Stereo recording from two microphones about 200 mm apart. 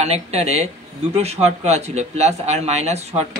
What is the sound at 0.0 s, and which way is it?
A man's voice, 35° right (ahead or behind).